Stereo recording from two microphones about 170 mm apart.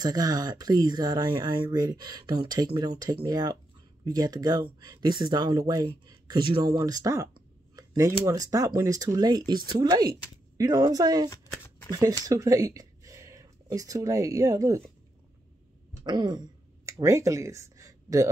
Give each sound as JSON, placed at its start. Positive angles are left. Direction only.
{"t": 0.0, "sound": "speech", "side_deg": -25}
{"t": 7.7, "sound": "a sound", "side_deg": -20}
{"t": 8.3, "sound": "speech", "side_deg": -20}
{"t": 16.0, "sound": "throat clearing", "side_deg": -25}